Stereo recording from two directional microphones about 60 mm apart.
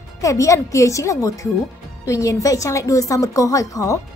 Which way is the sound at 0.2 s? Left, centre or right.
Left.